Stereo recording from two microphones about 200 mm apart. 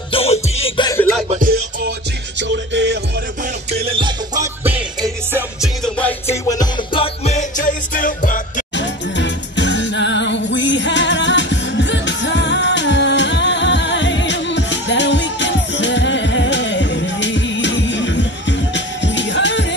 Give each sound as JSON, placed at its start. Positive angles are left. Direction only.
{"t": 0.1, "sound": "music", "side_deg": 30}
{"t": 1.3, "sound": "music", "side_deg": -45}
{"t": 2.4, "sound": "music", "side_deg": -65}
{"t": 3.7, "sound": "music", "side_deg": -30}
{"t": 4.6, "sound": "music", "side_deg": -10}
{"t": 6.5, "sound": "music", "side_deg": 25}
{"t": 8.7, "sound": "music", "side_deg": 65}